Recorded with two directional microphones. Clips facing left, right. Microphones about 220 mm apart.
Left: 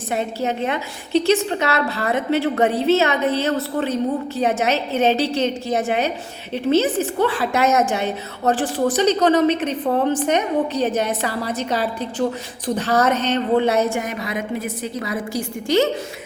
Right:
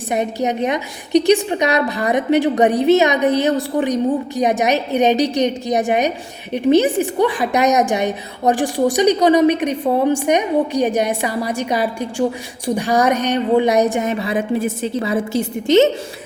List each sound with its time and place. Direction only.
0.1 s a woman's voice: 15° right (ahead or behind)